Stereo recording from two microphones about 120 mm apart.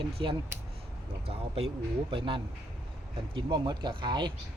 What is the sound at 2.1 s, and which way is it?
Speech, 45° right (ahead or behind).